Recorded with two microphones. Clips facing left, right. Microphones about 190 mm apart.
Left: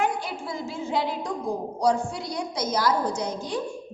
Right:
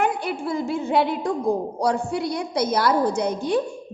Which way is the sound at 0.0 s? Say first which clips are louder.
Right 4 dB; 60° right (ahead or behind).